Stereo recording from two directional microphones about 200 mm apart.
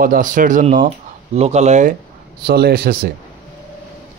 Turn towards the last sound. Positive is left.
turn(degrees=-50)  # may be behind; listen again after turning